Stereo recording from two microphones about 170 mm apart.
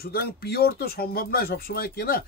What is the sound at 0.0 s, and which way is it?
Speech, 65° left (ahead or behind).